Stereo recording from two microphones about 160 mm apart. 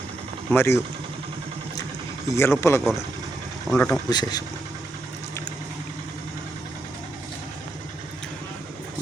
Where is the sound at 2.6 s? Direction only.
15° left (ahead or behind).